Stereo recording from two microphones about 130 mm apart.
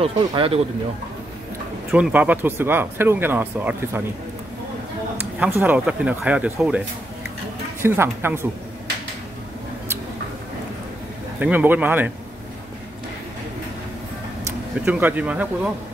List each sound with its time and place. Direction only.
0.3 s speech: 45° right (ahead or behind)
1.9 s speech: 5° right (ahead or behind)
5.2 s speech: 15° right (ahead or behind)
7.8 s speech: 20° right (ahead or behind)
11.3 s speech: 15° right (ahead or behind)
14.9 s speech: 10° right (ahead or behind)